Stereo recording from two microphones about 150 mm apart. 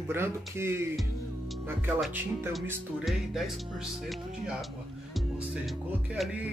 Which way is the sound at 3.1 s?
Centre (ahead or behind).